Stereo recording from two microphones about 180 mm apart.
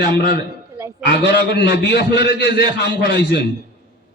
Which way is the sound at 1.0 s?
65° left (ahead or behind).